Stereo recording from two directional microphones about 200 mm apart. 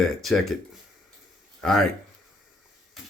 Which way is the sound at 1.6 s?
Centre (ahead or behind).